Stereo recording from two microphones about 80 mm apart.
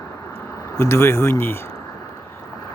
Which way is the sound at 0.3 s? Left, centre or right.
Left.